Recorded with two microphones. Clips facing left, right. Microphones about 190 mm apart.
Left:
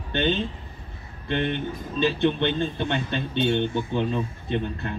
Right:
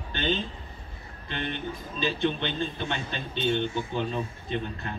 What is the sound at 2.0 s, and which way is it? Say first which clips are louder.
Speech: left 5 dB; 60° left (ahead or behind).